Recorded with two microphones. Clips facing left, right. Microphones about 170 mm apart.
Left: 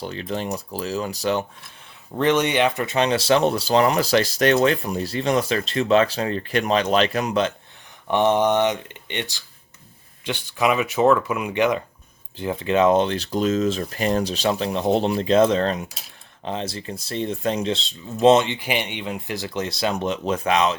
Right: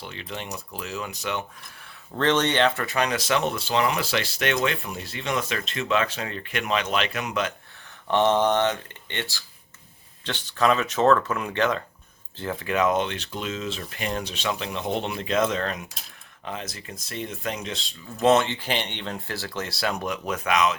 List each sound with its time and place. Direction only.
0.0 s speech: 40° left (ahead or behind)
2.1 s speech: 10° left (ahead or behind); by 7.5 s 30° left (ahead or behind)
8.0 s speech: 15° left (ahead or behind); by 20.7 s 30° left (ahead or behind)